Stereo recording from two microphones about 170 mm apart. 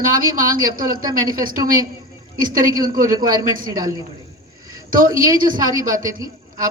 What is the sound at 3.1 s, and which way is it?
Speech, 25° right (ahead or behind).